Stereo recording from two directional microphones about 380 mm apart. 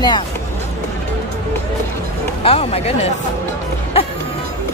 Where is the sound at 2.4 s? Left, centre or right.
Centre.